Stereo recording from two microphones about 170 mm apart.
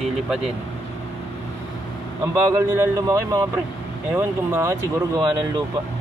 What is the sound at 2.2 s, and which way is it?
Speech, 20° right (ahead or behind).